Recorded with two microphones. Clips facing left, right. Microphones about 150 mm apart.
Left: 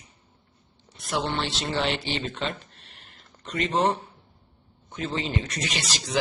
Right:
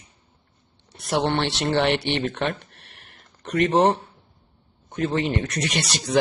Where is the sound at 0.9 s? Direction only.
65° right (ahead or behind).